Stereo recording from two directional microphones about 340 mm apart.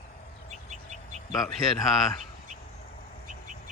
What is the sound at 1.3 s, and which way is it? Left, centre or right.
Speech, centre.